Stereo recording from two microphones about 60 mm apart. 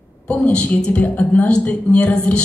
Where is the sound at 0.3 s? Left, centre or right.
Centre.